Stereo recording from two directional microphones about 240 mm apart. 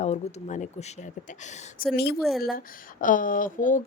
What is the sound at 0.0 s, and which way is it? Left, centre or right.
Speech, left.